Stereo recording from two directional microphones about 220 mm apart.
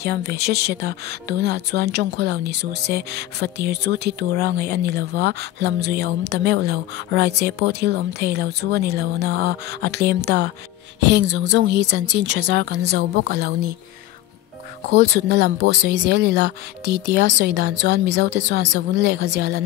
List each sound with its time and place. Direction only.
0.0 s speech: 45° right (ahead or behind)
14.9 s speech: 45° right (ahead or behind)